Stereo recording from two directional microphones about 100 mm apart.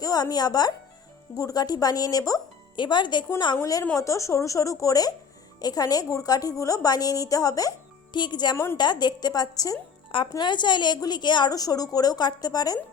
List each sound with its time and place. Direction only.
0.0 s a woman's voice: 40° left (ahead or behind)
2.7 s a woman's voice: 50° left (ahead or behind)
3.6 s a woman's voice: 35° left (ahead or behind)
8.1 s a woman's voice: 50° left (ahead or behind)
10.1 s a woman's voice: 55° left (ahead or behind); by 12.8 s 40° left (ahead or behind)